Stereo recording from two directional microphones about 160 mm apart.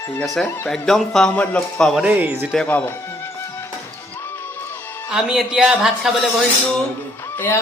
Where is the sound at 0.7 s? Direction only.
Centre (ahead or behind).